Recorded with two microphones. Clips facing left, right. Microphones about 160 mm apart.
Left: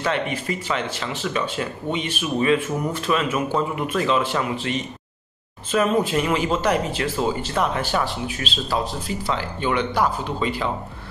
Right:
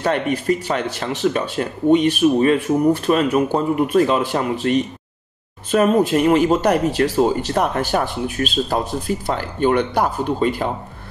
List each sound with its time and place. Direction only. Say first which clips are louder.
0.0 s speech: right 5 dB; 45° right (ahead or behind)